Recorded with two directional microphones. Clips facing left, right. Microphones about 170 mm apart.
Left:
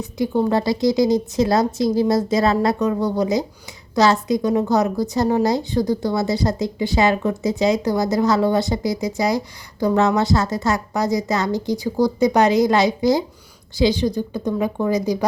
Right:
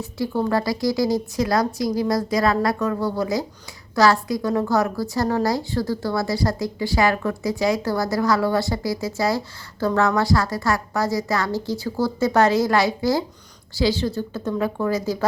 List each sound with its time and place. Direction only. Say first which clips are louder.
0.0 s a woman's voice: left 4 dB; 20° left (ahead or behind)